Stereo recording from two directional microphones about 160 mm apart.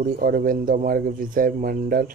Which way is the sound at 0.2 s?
60° right (ahead or behind).